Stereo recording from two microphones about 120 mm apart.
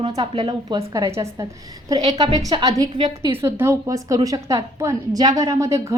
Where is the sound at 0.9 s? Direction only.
25° right (ahead or behind).